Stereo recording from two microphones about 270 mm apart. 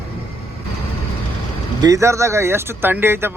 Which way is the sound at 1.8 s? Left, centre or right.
Centre.